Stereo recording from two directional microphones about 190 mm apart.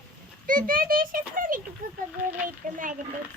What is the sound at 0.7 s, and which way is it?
Speech, 50° right (ahead or behind).